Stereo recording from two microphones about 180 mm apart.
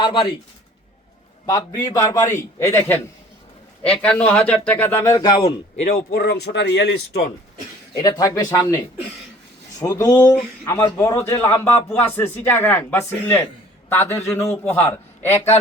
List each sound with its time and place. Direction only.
0.0 s speech: 25° left (ahead or behind)
1.5 s a man's voice: 20° left (ahead or behind)
5.5 s speech: 45° left (ahead or behind); by 7.3 s 70° left (ahead or behind)
7.9 s a man's voice: 20° left (ahead or behind)